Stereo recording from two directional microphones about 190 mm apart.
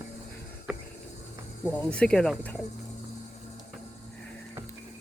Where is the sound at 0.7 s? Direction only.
5° right (ahead or behind).